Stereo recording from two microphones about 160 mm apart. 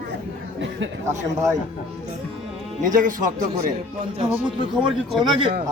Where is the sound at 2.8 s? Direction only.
55° right (ahead or behind).